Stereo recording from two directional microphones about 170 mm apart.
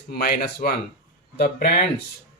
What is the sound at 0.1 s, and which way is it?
Speech, 65° left (ahead or behind).